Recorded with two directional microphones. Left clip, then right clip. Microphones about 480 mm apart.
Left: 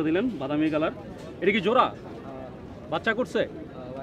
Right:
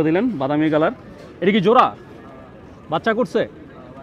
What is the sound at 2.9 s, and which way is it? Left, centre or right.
Speech, right.